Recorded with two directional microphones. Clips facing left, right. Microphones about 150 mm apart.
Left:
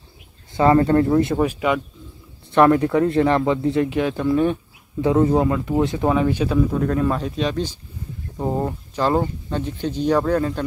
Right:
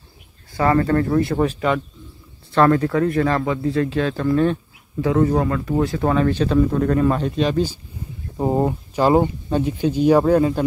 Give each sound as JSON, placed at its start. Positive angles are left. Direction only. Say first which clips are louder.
{"t": 0.6, "sound": "speech", "louder": "left 2 dB", "side_deg": 25}
{"t": 1.4, "sound": "speech", "louder": "even", "side_deg": 10}
{"t": 5.0, "sound": "speech", "louder": "left 1 dB", "side_deg": 25}